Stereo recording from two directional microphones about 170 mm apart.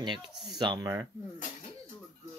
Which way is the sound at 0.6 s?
20° right (ahead or behind).